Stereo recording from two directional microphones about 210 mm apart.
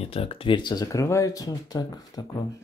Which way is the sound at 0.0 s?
30° left (ahead or behind).